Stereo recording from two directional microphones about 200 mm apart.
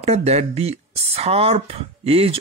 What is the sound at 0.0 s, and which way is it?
Speech, 30° right (ahead or behind).